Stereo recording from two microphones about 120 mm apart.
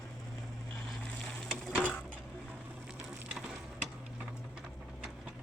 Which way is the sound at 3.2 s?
5° right (ahead or behind).